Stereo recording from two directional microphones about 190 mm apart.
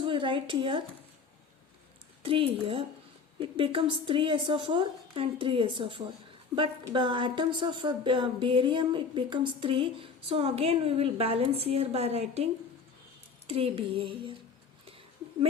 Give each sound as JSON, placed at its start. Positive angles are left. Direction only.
{"t": 0.0, "sound": "speech", "side_deg": -25}
{"t": 2.2, "sound": "a woman's voice", "side_deg": -30}
{"t": 13.5, "sound": "a woman's voice", "side_deg": -30}